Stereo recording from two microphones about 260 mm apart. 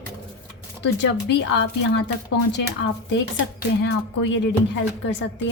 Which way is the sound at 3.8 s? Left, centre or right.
Left.